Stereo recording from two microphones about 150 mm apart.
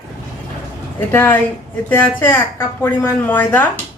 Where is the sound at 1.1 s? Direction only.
15° left (ahead or behind).